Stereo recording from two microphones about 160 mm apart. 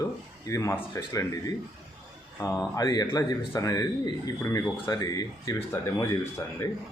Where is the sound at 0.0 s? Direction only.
20° left (ahead or behind).